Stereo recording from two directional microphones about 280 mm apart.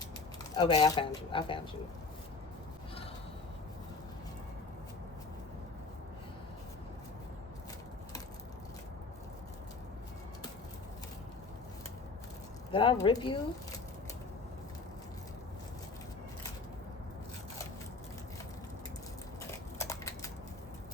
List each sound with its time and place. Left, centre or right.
0.5 s speech: centre
12.7 s speech: centre
19.5 s a sound: centre